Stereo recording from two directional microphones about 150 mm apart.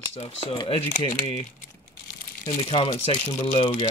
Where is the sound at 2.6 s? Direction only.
35° left (ahead or behind).